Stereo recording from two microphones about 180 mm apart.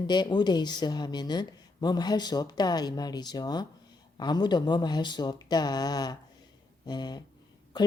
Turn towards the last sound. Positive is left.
turn(degrees=25)  # may be behind; listen again after turning